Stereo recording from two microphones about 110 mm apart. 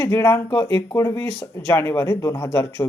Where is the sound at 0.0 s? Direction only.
20° left (ahead or behind).